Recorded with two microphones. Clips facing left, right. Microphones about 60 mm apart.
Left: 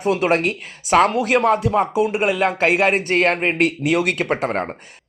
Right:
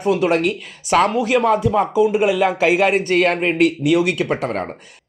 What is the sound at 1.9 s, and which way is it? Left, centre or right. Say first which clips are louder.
Speech: right 3 dB; left.